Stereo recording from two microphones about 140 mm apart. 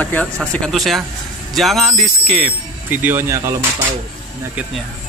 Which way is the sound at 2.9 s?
15° right (ahead or behind).